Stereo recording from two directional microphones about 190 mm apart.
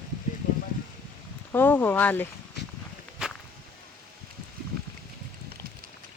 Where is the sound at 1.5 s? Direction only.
10° left (ahead or behind).